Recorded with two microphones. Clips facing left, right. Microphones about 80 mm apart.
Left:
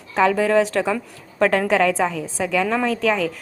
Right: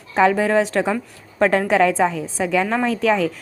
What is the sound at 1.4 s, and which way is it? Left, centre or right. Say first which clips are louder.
A woman's voice: right 1 dB; right.